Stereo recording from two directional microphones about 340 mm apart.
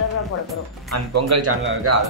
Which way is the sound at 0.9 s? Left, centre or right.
Right.